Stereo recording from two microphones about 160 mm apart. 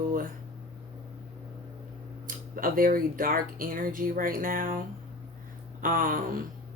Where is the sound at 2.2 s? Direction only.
60° right (ahead or behind).